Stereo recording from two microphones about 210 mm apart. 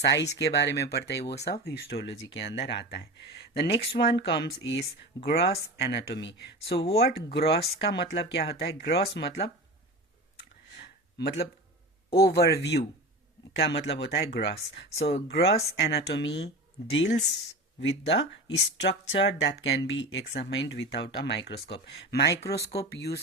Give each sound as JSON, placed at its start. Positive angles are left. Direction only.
{"t": 0.0, "sound": "speech", "side_deg": 55}
{"t": 10.8, "sound": "a sound", "side_deg": 50}
{"t": 12.1, "sound": "speech", "side_deg": 50}
{"t": 14.8, "sound": "speech", "side_deg": 30}
{"t": 15.1, "sound": "speech", "side_deg": 55}